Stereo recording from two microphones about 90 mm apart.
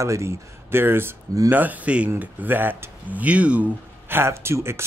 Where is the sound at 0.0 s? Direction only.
35° right (ahead or behind); by 3.6 s 15° right (ahead or behind).